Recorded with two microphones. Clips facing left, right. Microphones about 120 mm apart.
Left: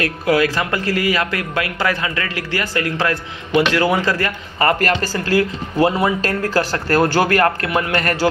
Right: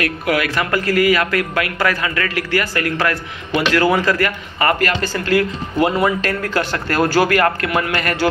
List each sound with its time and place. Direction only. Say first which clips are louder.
0.0 s a man's voice: left 2 dB; 30° left (ahead or behind)
7.9 s speech: left 1 dB; 40° left (ahead or behind)